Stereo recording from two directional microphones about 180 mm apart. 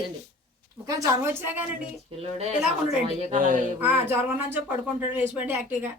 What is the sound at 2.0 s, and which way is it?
Speech, 35° right (ahead or behind).